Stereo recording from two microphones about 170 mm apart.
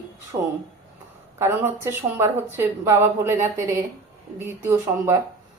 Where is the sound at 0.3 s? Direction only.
25° right (ahead or behind).